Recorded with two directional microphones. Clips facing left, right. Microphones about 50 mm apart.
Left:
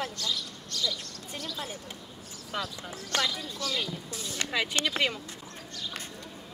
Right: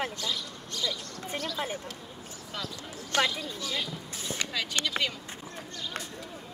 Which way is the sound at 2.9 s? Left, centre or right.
Right.